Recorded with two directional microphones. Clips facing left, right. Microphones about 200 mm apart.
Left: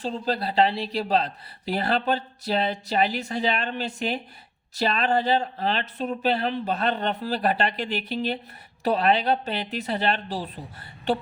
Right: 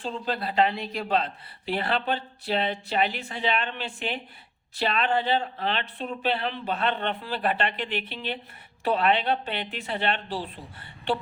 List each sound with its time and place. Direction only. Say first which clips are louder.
0.0 s speech: left 3 dB; 35° left (ahead or behind)